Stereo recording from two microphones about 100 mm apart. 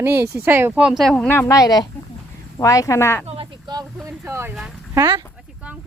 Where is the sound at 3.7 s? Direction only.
35° right (ahead or behind).